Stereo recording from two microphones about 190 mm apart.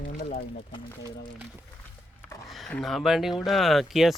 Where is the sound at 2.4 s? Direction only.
Centre (ahead or behind).